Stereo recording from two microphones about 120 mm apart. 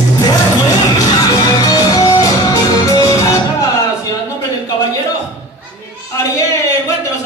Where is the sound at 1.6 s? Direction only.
30° left (ahead or behind).